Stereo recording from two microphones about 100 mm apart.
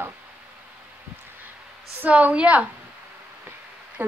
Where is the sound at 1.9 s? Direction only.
15° right (ahead or behind).